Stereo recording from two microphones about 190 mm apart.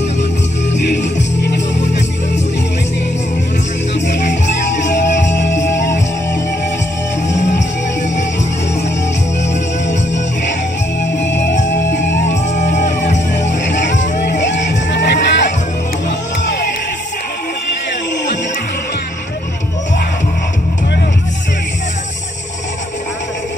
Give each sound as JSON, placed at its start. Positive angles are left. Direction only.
{"t": 0.8, "sound": "music", "side_deg": 60}
{"t": 5.4, "sound": "music", "side_deg": 70}
{"t": 11.1, "sound": "music", "side_deg": 65}
{"t": 12.4, "sound": "music", "side_deg": 40}
{"t": 13.5, "sound": "music", "side_deg": 70}